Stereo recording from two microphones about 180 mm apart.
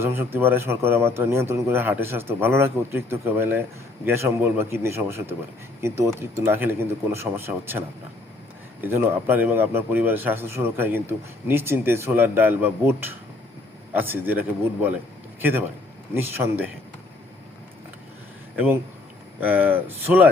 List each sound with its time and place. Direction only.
0.0 s a man's voice: 15° right (ahead or behind)
18.5 s a man's voice: 10° right (ahead or behind)